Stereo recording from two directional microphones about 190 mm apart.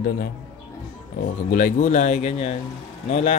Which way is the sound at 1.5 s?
45° left (ahead or behind).